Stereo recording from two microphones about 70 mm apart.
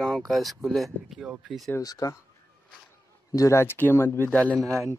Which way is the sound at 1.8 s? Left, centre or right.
Left.